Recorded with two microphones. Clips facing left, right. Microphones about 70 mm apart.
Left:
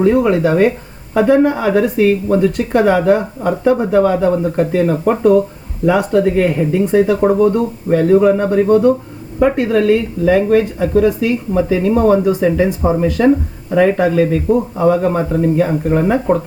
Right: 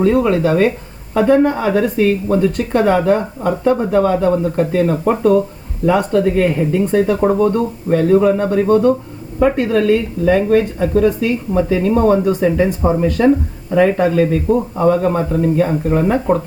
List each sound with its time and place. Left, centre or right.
0.0 s speech: centre
1.1 s speech: centre
6.0 s speech: centre